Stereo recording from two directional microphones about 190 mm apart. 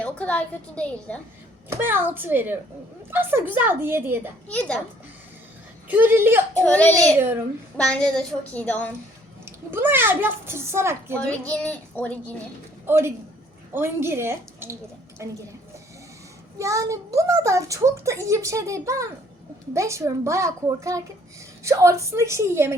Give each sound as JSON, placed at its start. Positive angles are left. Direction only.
{"t": 0.0, "sound": "a woman's voice", "side_deg": 5}
{"t": 1.7, "sound": "a woman's voice", "side_deg": -10}
{"t": 4.4, "sound": "a woman's voice", "side_deg": 5}
{"t": 5.9, "sound": "a woman's voice", "side_deg": -10}
{"t": 6.6, "sound": "a woman's voice", "side_deg": 5}
{"t": 9.7, "sound": "a woman's voice", "side_deg": -10}
{"t": 11.3, "sound": "a woman's voice", "side_deg": 10}
{"t": 12.8, "sound": "a woman's voice", "side_deg": -15}
{"t": 16.6, "sound": "a woman's voice", "side_deg": -15}